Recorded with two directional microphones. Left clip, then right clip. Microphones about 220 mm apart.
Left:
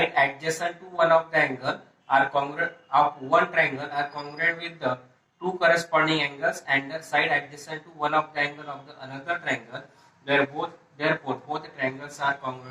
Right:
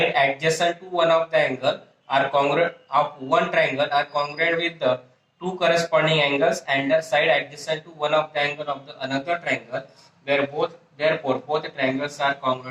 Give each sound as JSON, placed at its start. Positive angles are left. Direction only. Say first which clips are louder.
{"t": 0.1, "sound": "speech", "louder": "right 4 dB", "side_deg": -25}